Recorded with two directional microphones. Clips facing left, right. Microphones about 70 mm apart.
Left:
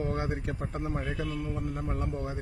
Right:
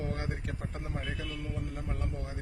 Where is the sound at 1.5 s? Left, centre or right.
Left.